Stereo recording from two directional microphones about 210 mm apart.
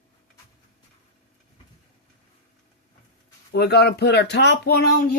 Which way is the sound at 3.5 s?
50° left (ahead or behind).